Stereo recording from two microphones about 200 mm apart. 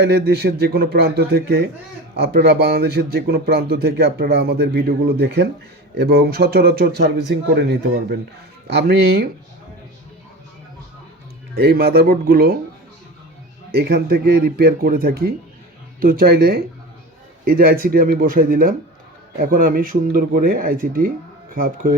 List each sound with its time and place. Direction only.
0.0 s speech: 55° right (ahead or behind)
8.6 s speech: 55° right (ahead or behind)
11.5 s speech: 50° right (ahead or behind)
13.7 s speech: 50° right (ahead or behind)